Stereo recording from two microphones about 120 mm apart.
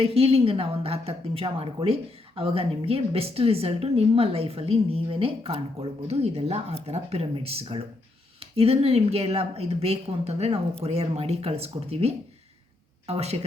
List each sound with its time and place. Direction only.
0.0 s a woman's voice: 55° right (ahead or behind)
7.3 s a woman's voice: 50° right (ahead or behind)